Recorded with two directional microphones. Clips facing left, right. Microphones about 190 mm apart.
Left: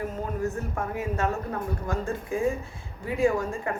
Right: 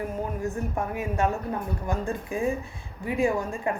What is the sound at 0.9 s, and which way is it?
A woman's voice, 15° right (ahead or behind).